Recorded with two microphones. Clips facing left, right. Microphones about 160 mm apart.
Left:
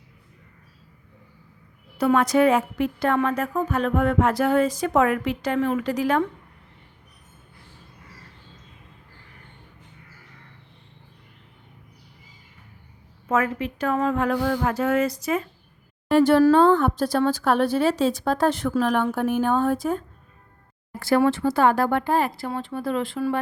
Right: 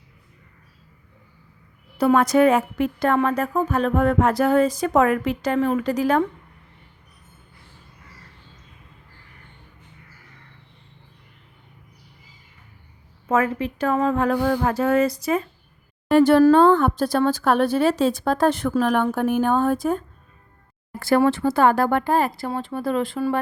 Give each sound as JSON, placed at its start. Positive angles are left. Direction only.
{"t": 2.0, "sound": "speech", "side_deg": -35}
{"t": 3.2, "sound": "music", "side_deg": -35}
{"t": 13.2, "sound": "music", "side_deg": -30}
{"t": 16.0, "sound": "speech", "side_deg": -55}
{"t": 21.0, "sound": "speech", "side_deg": -50}